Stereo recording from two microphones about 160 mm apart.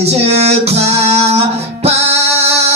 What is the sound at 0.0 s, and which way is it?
Music, 40° right (ahead or behind).